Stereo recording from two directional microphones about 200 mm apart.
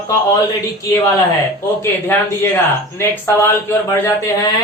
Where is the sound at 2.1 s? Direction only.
10° left (ahead or behind).